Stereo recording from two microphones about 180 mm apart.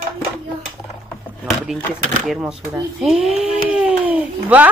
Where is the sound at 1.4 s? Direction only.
Centre (ahead or behind).